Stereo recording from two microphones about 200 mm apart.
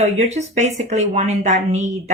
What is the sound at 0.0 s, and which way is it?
A woman's voice, 35° right (ahead or behind).